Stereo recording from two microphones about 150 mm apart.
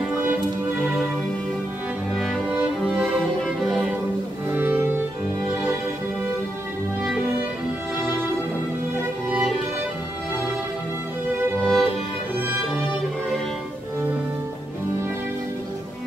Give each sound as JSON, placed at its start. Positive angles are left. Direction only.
{"t": 2.1, "sound": "music", "side_deg": 0}
{"t": 4.5, "sound": "music", "side_deg": -15}
{"t": 9.3, "sound": "music", "side_deg": -5}
{"t": 11.6, "sound": "music", "side_deg": 0}